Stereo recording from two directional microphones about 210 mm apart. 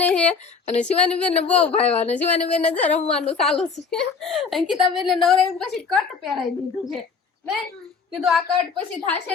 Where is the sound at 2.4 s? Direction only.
30° left (ahead or behind).